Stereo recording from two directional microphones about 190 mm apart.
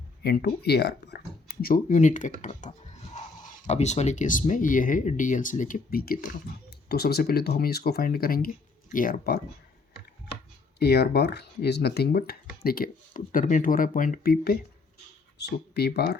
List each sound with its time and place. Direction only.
0.2 s speech: 55° left (ahead or behind)
10.8 s speech: 60° left (ahead or behind)